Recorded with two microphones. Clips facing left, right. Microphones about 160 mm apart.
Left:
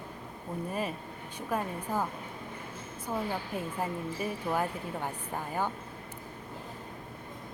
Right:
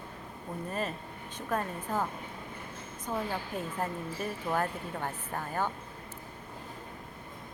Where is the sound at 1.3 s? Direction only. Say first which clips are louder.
Even; 10° left (ahead or behind).